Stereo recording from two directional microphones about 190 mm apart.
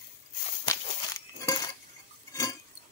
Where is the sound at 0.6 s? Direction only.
20° left (ahead or behind).